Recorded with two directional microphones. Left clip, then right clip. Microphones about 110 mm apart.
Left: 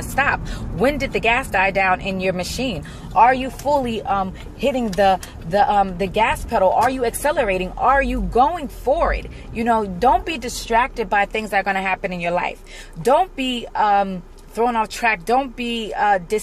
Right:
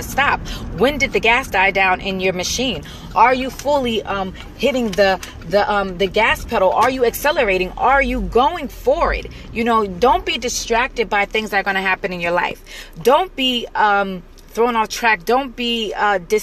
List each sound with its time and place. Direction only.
0.1 s speech: 25° left (ahead or behind)